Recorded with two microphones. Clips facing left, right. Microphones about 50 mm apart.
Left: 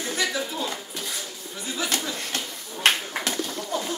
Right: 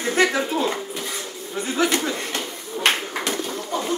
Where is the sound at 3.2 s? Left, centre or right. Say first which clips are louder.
Right 3 dB; right.